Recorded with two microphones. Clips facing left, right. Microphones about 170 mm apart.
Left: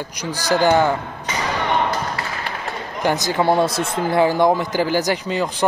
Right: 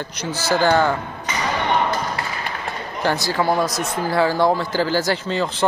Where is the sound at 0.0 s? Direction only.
10° left (ahead or behind).